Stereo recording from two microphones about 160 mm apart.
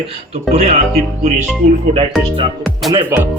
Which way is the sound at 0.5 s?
40° right (ahead or behind).